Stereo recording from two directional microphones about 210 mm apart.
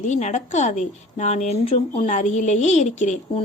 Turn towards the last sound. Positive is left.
turn(degrees=35)  # may be behind; listen again after turning